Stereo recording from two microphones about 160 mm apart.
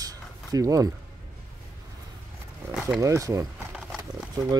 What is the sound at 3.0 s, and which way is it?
Speech, 20° right (ahead or behind).